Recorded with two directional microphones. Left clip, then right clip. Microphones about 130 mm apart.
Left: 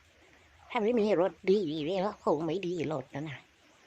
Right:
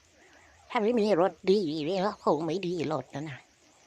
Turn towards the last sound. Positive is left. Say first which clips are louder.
# right 3 dB
turn(degrees=-25)  # may be behind; listen again after turning